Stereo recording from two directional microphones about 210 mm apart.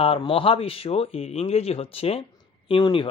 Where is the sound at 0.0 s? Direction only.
25° left (ahead or behind).